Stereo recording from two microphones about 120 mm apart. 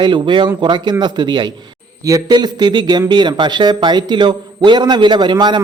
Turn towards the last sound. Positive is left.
turn(degrees=-40)  # may be behind; listen again after turning